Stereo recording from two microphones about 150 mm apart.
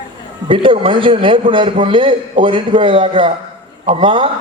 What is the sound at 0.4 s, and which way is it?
A man's voice, 35° right (ahead or behind).